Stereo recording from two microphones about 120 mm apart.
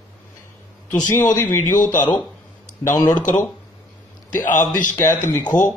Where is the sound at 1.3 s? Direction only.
15° left (ahead or behind).